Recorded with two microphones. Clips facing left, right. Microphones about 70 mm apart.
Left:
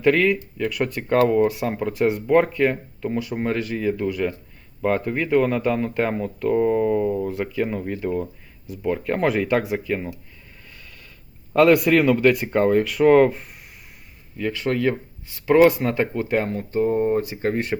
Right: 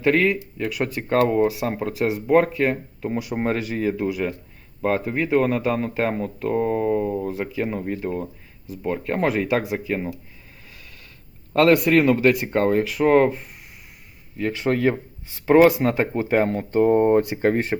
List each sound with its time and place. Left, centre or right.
0.0 s speech: centre
1.1 s speech: centre
1.8 s speech: centre
11.5 s speech: centre
14.3 s speech: centre
15.3 s a sound: right
15.6 s speech: centre
16.5 s speech: right
17.3 s speech: right